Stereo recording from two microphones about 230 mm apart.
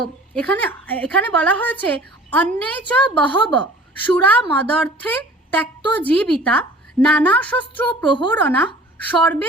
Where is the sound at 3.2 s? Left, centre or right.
Centre.